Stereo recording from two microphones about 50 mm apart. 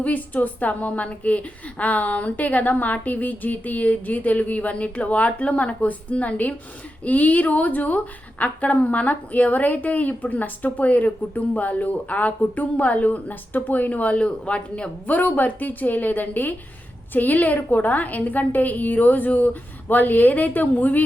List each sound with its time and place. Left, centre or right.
0.0 s a woman's voice: left